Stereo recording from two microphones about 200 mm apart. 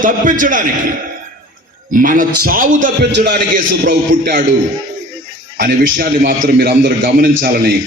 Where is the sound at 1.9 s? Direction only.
40° right (ahead or behind).